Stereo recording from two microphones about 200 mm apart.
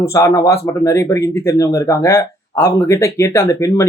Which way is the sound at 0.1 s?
15° left (ahead or behind).